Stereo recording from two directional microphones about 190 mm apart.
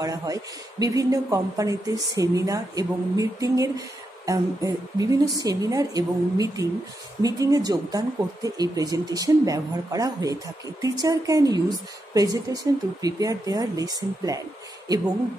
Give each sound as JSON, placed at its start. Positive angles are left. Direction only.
{"t": 0.0, "sound": "speech", "side_deg": -20}